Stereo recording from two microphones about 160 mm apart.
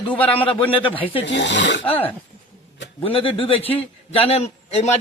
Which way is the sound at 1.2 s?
90° left.